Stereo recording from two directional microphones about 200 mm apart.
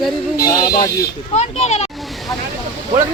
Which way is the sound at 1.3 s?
35° left (ahead or behind).